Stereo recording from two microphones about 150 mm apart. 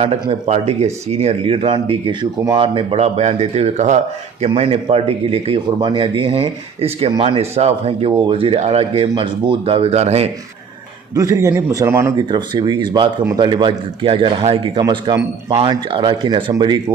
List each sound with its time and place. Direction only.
0.3 s a man's voice: 45° right (ahead or behind)
11.1 s a man's voice: 20° right (ahead or behind)
12.3 s a man's voice: 30° right (ahead or behind)